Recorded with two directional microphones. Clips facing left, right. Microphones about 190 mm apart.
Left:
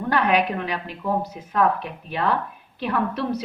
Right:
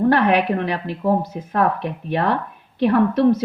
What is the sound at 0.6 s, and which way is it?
Speech, 40° right (ahead or behind).